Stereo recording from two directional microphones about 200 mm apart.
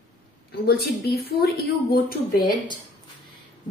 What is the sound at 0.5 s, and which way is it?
A woman's voice, 55° left (ahead or behind).